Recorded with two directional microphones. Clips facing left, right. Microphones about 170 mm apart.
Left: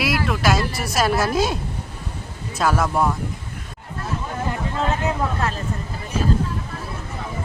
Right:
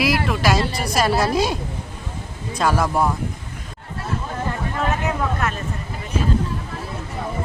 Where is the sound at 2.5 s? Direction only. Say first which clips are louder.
Right 1 dB; centre (ahead or behind).